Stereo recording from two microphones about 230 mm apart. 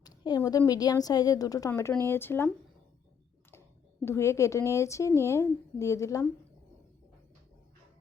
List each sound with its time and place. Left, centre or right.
0.0 s a woman's voice: centre
4.0 s a woman's voice: centre